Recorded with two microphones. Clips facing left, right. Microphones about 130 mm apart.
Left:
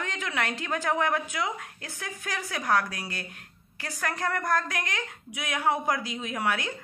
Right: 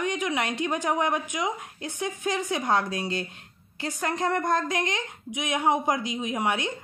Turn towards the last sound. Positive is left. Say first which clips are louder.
# right 2 dB
turn(degrees=-20)  # may be behind; listen again after turning